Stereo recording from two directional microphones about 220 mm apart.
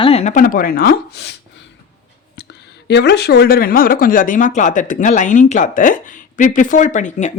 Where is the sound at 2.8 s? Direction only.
50° left (ahead or behind).